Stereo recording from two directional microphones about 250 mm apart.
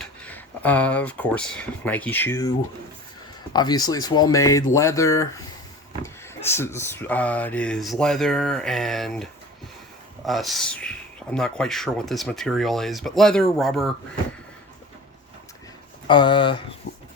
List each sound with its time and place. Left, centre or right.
0.0 s speech: centre
3.5 s speech: centre
10.2 s speech: centre
16.0 s speech: centre